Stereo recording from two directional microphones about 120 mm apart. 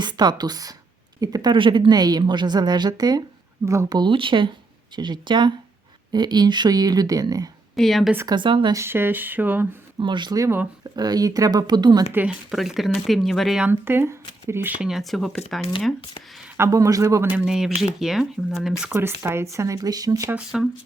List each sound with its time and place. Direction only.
0.0 s a woman's voice: 35° right (ahead or behind)
7.8 s speech: centre (ahead or behind)
8.3 s a woman's voice: 40° right (ahead or behind)
8.7 s speech: 20° right (ahead or behind)
10.0 s a woman's voice: 40° right (ahead or behind)
12.1 s speech: 10° right (ahead or behind)
13.7 s speech: 20° right (ahead or behind)
14.8 s speech: centre (ahead or behind)
16.6 s speech: 25° right (ahead or behind)
17.2 s speech: 10° right (ahead or behind)
18.9 s speech: 20° right (ahead or behind)
20.3 s speech: 5° right (ahead or behind)